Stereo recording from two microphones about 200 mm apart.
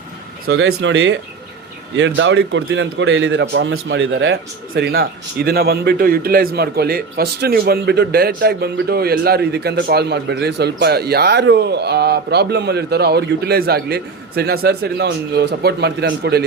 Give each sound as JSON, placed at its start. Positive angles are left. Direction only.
{"t": 0.4, "sound": "a man's voice", "side_deg": -65}
{"t": 4.7, "sound": "a man's voice", "side_deg": -50}